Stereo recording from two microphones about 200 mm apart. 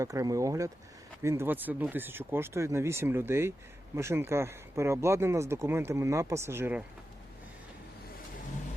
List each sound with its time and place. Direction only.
0.0 s speech: 15° right (ahead or behind)